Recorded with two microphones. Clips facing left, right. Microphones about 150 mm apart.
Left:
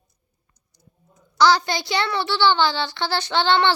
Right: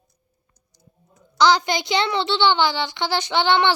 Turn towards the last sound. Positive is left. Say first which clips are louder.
# even
turn(degrees=-15)  # may be behind; listen again after turning